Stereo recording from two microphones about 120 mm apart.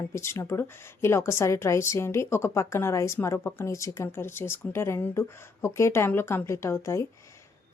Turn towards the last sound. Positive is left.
turn(degrees=25)  # may be behind; listen again after turning